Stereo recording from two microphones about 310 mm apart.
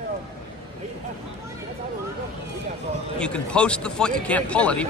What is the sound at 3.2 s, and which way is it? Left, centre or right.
A man's voice, centre.